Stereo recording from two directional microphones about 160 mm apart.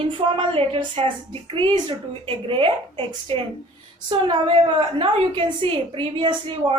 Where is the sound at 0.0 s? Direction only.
30° right (ahead or behind).